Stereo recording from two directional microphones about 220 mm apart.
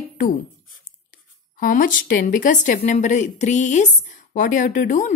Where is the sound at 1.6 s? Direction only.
40° left (ahead or behind).